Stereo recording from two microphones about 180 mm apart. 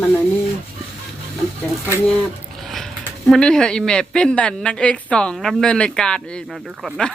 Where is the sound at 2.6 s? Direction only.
Centre (ahead or behind).